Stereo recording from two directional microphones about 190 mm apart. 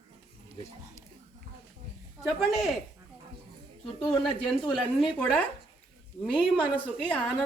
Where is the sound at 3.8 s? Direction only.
20° left (ahead or behind).